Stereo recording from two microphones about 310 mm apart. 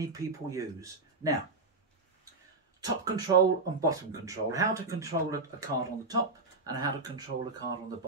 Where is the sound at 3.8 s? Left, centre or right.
Centre.